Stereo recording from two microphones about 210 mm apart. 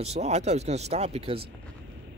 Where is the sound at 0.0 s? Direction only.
30° right (ahead or behind).